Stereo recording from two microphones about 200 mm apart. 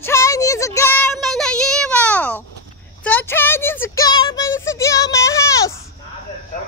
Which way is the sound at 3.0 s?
10° left (ahead or behind).